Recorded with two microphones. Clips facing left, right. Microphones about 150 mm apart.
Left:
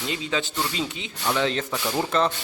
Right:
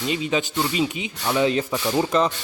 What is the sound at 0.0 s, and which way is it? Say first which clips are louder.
Speech: right 4 dB; 20° right (ahead or behind).